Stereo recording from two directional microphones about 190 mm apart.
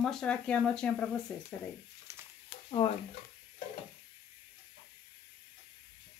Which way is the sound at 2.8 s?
30° left (ahead or behind).